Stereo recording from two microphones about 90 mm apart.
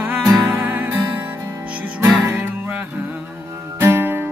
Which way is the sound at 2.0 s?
35° right (ahead or behind).